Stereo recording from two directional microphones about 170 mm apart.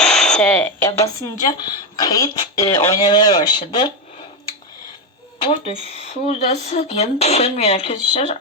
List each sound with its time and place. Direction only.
0.0 s radio: 5° left (ahead or behind)
1.0 s speech: 20° left (ahead or behind)
5.4 s speech: 30° left (ahead or behind)